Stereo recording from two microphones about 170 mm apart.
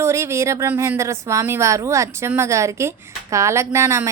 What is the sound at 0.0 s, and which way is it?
A woman's voice, 15° right (ahead or behind).